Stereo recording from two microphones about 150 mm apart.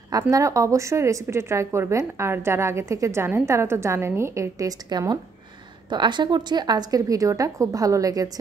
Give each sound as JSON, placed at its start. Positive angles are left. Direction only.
{"t": 0.3, "sound": "a woman's voice", "side_deg": -20}